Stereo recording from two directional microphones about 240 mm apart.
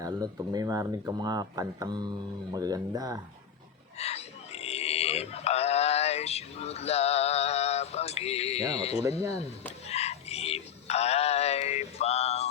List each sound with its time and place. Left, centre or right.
0.0 s speech: centre
3.9 s a sound: left
8.7 s speech: left
9.8 s synthetic singing: left